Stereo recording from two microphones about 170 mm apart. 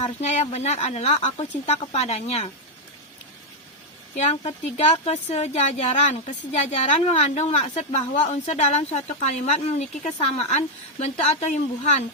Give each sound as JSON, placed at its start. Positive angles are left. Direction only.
{"t": 0.0, "sound": "a woman's voice", "side_deg": 40}
{"t": 4.2, "sound": "a woman's voice", "side_deg": 40}